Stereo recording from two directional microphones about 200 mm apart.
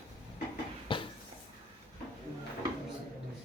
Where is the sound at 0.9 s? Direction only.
25° left (ahead or behind).